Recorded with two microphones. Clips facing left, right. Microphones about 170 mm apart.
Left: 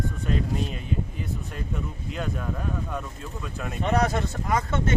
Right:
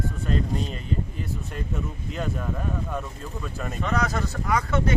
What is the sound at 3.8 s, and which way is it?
Speech, 30° left (ahead or behind).